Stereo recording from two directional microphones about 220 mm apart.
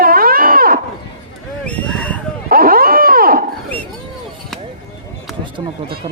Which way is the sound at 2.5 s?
40° right (ahead or behind).